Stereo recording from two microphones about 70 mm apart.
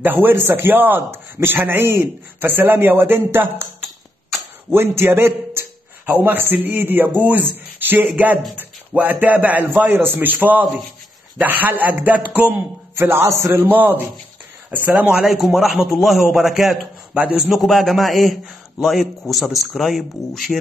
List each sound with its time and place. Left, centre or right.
0.0 s a man's voice: right
4.7 s a man's voice: right
12.9 s a man's voice: right
15.0 s a man's voice: centre
17.1 s a man's voice: centre
17.4 s a man's voice: centre